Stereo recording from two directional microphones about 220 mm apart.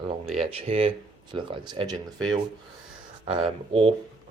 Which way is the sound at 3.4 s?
25° right (ahead or behind).